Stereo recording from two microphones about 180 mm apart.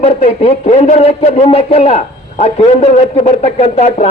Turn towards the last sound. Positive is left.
turn(degrees=35)  # may be behind; listen again after turning